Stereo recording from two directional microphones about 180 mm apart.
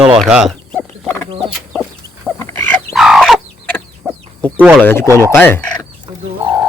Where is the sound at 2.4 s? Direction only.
10° left (ahead or behind).